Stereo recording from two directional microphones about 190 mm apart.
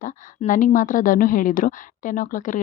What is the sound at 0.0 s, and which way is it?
A woman's voice, 45° left (ahead or behind).